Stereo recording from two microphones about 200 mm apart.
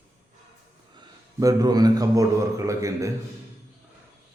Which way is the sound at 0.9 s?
15° right (ahead or behind).